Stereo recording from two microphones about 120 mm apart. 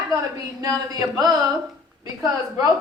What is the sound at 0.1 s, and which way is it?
A woman's voice, 30° right (ahead or behind).